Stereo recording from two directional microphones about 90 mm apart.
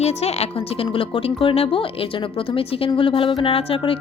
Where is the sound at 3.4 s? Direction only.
90° left.